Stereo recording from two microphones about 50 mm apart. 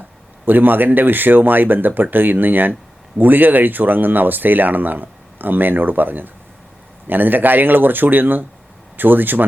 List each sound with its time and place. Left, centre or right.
0.4 s speech: right